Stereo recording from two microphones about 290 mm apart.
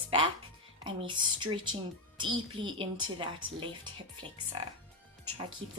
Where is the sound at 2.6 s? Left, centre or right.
Centre.